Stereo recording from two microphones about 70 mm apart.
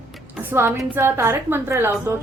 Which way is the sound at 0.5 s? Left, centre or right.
Right.